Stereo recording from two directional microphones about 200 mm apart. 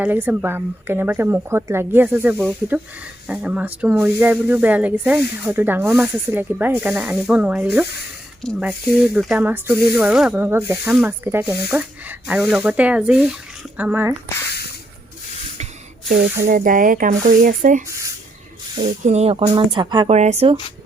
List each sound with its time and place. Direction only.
0.0 s speech: 10° right (ahead or behind)
16.0 s speech: 45° right (ahead or behind)
19.0 s speech: 30° right (ahead or behind)
20.1 s speech: 35° right (ahead or behind)